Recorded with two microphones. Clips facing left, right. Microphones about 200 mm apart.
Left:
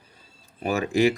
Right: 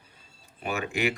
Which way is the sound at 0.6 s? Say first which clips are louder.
Left 7 dB; 35° left (ahead or behind).